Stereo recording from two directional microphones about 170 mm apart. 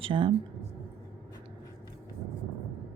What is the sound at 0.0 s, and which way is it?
Speech, 30° right (ahead or behind).